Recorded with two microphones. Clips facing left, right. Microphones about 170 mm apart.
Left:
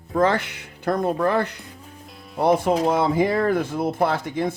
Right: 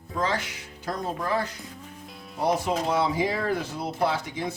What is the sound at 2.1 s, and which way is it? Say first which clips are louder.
Music: even; centre (ahead or behind).